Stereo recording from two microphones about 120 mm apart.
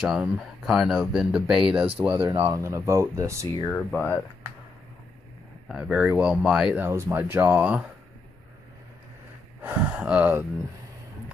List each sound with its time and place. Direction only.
0.0 s speech: 5° right (ahead or behind)
2.4 s speech: 25° right (ahead or behind)
3.6 s speech: 15° left (ahead or behind)
5.7 s speech: 5° right (ahead or behind)
6.9 s speech: 20° right (ahead or behind)
9.6 s speech: 10° right (ahead or behind)